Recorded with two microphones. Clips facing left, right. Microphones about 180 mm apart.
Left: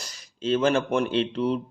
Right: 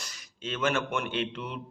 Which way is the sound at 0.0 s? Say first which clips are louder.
Left 9 dB; 35° left (ahead or behind).